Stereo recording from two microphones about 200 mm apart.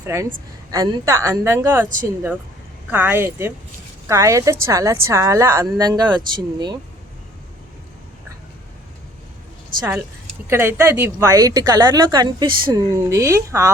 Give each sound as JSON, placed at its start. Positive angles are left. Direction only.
{"t": 0.0, "sound": "a woman's voice", "side_deg": -15}
{"t": 2.9, "sound": "a woman's voice", "side_deg": -10}
{"t": 10.4, "sound": "a woman's voice", "side_deg": -10}